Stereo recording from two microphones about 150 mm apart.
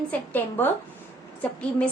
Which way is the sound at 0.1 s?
15° left (ahead or behind).